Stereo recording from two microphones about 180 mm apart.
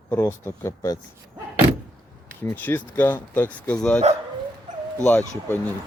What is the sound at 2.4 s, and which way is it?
Speech, 10° left (ahead or behind).